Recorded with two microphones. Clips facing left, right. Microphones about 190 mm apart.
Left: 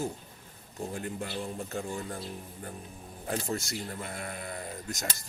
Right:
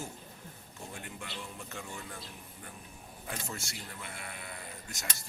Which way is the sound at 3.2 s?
35° left (ahead or behind).